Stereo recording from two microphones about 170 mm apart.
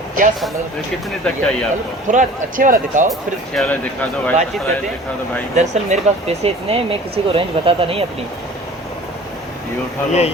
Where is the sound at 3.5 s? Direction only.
5° left (ahead or behind).